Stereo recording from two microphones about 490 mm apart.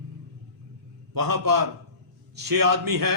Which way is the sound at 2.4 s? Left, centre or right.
Right.